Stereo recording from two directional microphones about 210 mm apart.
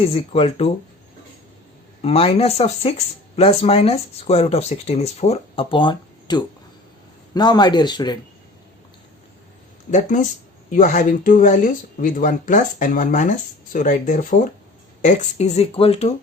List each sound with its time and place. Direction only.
0.1 s speech: 25° left (ahead or behind)
2.0 s speech: 30° left (ahead or behind)
9.9 s speech: 35° left (ahead or behind)